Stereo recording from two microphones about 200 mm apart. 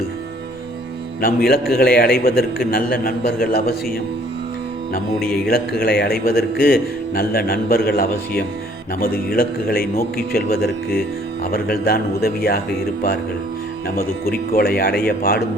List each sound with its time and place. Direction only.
1.2 s a man's voice: 50° left (ahead or behind)
4.9 s a man's voice: 50° left (ahead or behind)
13.8 s a man's voice: 45° left (ahead or behind)